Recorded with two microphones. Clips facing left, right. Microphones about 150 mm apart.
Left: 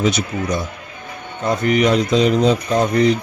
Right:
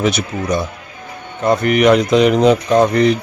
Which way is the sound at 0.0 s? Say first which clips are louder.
Right 1 dB; 60° right (ahead or behind).